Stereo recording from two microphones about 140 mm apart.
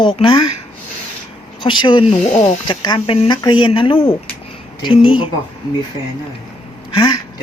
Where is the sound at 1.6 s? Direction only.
35° left (ahead or behind).